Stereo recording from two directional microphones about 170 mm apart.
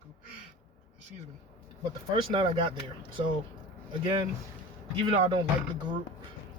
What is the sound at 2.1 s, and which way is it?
Speech, 30° right (ahead or behind).